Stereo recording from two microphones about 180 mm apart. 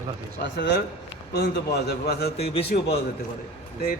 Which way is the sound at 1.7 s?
65° left (ahead or behind).